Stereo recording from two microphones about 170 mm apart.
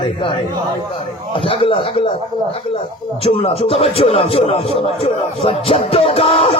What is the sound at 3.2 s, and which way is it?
Speech, 35° left (ahead or behind).